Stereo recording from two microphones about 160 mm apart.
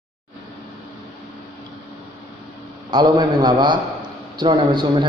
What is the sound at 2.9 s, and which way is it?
A man's voice, 25° right (ahead or behind).